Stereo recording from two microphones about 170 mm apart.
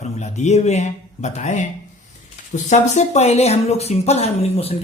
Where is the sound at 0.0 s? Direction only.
45° left (ahead or behind).